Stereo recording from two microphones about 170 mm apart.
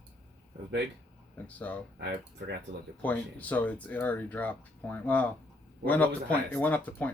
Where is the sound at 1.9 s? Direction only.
85° right.